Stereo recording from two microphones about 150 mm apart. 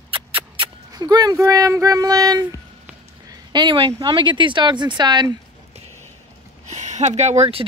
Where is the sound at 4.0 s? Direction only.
30° right (ahead or behind).